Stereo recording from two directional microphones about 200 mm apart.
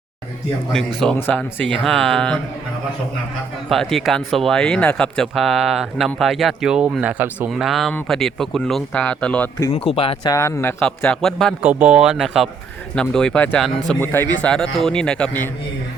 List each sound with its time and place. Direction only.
0.7 s speech: 5° left (ahead or behind)
3.7 s speech: centre (ahead or behind)
9.7 s speech: 30° left (ahead or behind)
10.3 s speech: 15° left (ahead or behind)